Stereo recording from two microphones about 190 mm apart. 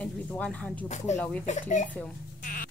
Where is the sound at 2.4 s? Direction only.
45° left (ahead or behind).